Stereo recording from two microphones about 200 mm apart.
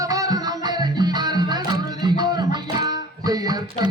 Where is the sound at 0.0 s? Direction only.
15° right (ahead or behind).